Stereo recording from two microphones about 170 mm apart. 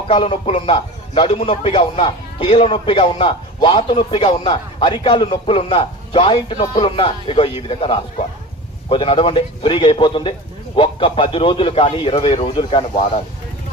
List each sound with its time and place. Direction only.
0.1 s a man's voice: 35° left (ahead or behind)